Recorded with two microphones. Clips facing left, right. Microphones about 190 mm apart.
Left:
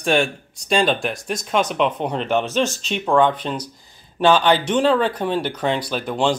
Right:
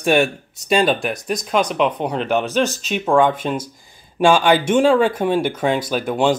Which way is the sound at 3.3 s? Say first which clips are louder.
Right 3 dB; 50° right (ahead or behind).